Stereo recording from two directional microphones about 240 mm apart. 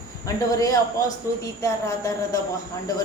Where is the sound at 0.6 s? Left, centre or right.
Centre.